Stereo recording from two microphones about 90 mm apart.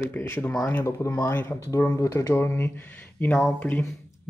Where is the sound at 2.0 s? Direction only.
40° left (ahead or behind).